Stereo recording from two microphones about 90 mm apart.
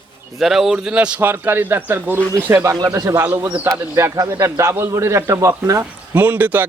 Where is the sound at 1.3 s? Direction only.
25° right (ahead or behind).